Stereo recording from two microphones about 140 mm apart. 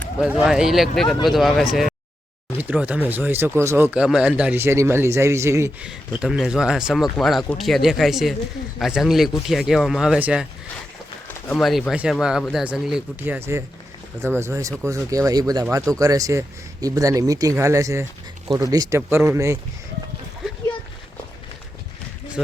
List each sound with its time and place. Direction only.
0.2 s speech: 5° right (ahead or behind)
2.6 s speech: 10° right (ahead or behind)
5.8 s speech: 5° right (ahead or behind)
11.5 s speech: centre (ahead or behind)
13.2 s speech: 15° right (ahead or behind)